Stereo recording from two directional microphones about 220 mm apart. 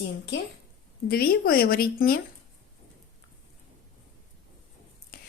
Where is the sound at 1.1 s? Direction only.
45° left (ahead or behind).